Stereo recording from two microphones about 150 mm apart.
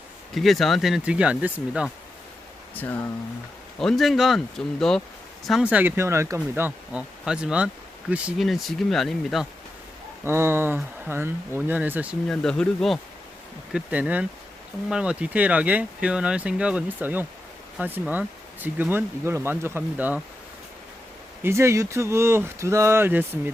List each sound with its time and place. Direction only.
0.3 s speech: centre (ahead or behind)
3.8 s speech: centre (ahead or behind)
5.5 s speech: 5° right (ahead or behind)
10.2 s speech: 15° right (ahead or behind)
12.3 s speech: 5° left (ahead or behind)
13.7 s speech: 10° right (ahead or behind)
21.4 s speech: 20° right (ahead or behind)